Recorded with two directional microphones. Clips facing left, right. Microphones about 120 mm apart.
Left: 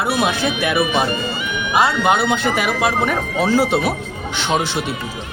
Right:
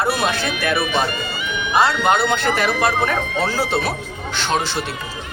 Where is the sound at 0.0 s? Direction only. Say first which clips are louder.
Left 2 dB; 10° left (ahead or behind).